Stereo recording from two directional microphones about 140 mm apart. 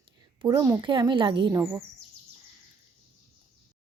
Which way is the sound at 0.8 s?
35° right (ahead or behind).